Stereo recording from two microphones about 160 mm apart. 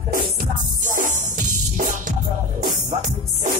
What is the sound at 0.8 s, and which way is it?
Music, 55° right (ahead or behind).